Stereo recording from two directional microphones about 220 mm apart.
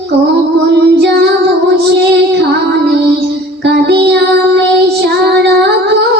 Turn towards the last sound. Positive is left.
turn(degrees=-50)  # may be behind; listen again after turning